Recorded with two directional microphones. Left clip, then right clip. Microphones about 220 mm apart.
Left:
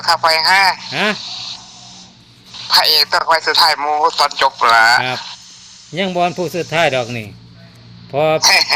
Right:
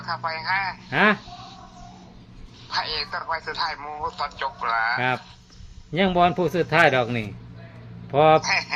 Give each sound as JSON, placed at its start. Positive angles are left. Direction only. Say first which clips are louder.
{"t": 0.0, "sound": "a man's voice", "louder": "left 15 dB", "side_deg": 50}